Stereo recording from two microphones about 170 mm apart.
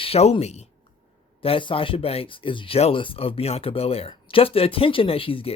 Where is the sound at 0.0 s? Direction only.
35° left (ahead or behind).